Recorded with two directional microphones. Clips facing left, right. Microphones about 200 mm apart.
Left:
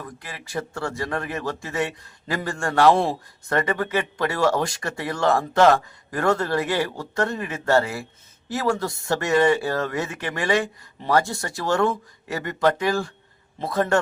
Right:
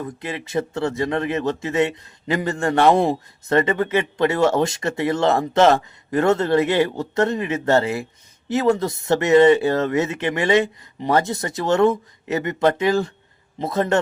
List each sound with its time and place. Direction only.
0.0 s a man's voice: 20° right (ahead or behind)